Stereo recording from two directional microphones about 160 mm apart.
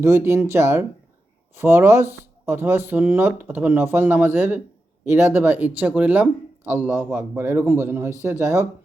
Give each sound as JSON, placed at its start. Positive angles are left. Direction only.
{"t": 0.0, "sound": "speech", "side_deg": -15}